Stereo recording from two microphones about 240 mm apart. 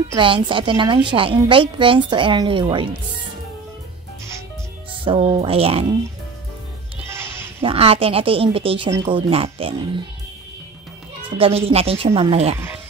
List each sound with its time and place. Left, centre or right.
0.1 s a woman's voice: right
5.0 s a woman's voice: right
7.6 s a woman's voice: right
11.2 s a woman's voice: right